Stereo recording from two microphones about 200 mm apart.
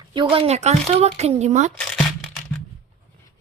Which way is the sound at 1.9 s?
Centre (ahead or behind).